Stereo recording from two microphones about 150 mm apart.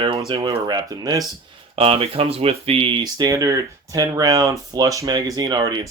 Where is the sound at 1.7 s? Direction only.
40° right (ahead or behind).